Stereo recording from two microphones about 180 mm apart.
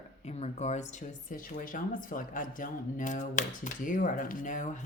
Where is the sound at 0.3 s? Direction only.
35° left (ahead or behind).